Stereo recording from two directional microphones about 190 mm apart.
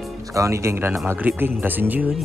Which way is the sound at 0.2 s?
15° right (ahead or behind).